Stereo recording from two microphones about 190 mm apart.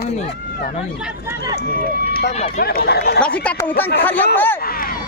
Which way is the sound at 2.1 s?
55° left (ahead or behind).